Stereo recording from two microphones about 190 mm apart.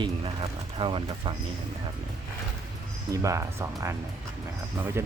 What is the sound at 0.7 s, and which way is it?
Speech, 30° right (ahead or behind).